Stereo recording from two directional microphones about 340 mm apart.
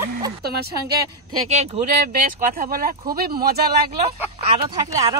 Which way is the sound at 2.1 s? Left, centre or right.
Right.